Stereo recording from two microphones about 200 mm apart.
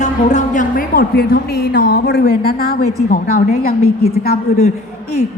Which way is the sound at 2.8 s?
35° left (ahead or behind).